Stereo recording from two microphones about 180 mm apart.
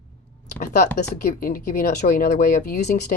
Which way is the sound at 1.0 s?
50° left (ahead or behind).